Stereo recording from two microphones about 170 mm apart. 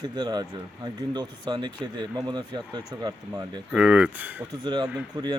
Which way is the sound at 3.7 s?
5° right (ahead or behind).